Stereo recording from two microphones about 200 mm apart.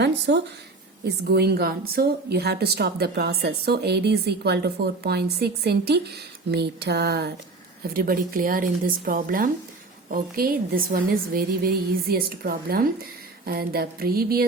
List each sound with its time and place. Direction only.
0.3 s a woman's voice: 55° right (ahead or behind)